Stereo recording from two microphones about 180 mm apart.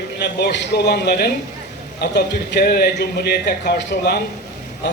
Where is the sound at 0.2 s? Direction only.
70° left (ahead or behind).